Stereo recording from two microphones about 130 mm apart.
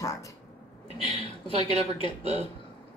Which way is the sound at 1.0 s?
40° left (ahead or behind).